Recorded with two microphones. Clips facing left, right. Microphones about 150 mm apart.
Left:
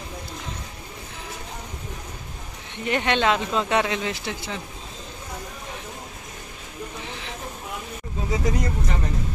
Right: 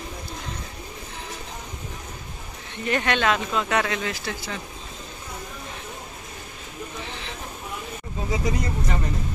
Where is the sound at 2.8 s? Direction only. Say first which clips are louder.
Left 1 dB; 20° left (ahead or behind).